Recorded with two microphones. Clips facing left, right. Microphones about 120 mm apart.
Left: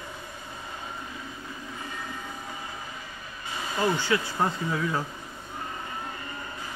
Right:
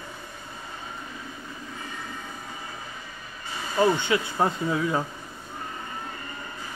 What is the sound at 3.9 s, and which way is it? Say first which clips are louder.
Speech: right 2 dB; 20° right (ahead or behind).